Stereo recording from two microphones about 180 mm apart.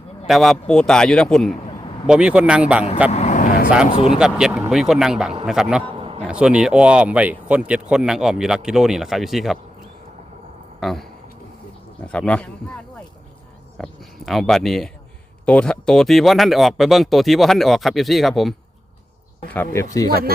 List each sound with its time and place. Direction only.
0.3 s speech: centre (ahead or behind)
3.1 s vehicle: 40° left (ahead or behind)
4.1 s speech: 5° right (ahead or behind)
5.8 s a sound: 30° right (ahead or behind)
6.2 s speech: 5° right (ahead or behind)
10.8 s speech: centre (ahead or behind)
12.0 s speech: 5° left (ahead or behind)
19.7 s speech: 15° left (ahead or behind)